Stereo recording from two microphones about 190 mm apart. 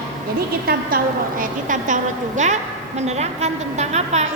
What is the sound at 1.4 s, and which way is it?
A woman's voice, 40° right (ahead or behind).